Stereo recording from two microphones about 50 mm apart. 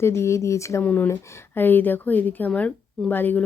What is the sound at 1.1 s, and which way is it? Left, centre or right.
Speech, left.